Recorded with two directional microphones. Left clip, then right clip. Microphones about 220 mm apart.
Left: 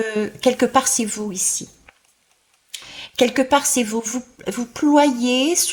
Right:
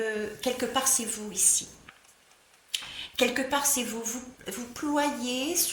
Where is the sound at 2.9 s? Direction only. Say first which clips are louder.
Left 9 dB; 40° left (ahead or behind).